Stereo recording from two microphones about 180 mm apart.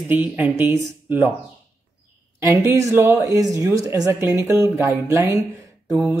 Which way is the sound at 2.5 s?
15° right (ahead or behind).